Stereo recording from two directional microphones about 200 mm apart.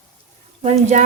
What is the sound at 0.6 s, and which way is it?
Speech, 30° right (ahead or behind).